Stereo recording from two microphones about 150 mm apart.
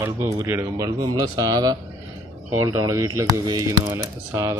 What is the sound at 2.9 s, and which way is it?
Speech, 20° right (ahead or behind).